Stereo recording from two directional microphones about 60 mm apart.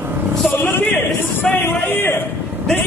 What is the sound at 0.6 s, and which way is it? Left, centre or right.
A man's voice, left.